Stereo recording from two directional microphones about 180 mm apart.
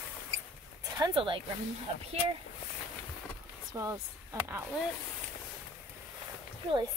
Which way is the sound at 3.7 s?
20° right (ahead or behind).